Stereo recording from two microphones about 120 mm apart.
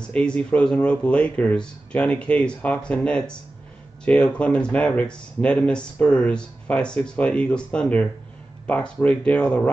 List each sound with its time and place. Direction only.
0.1 s speech: 10° left (ahead or behind)